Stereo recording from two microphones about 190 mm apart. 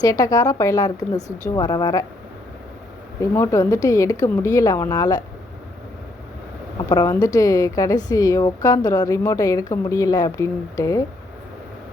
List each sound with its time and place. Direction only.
0.0 s a woman's voice: 20° left (ahead or behind)
3.2 s a woman's voice: 15° left (ahead or behind)
6.8 s a woman's voice: 15° left (ahead or behind)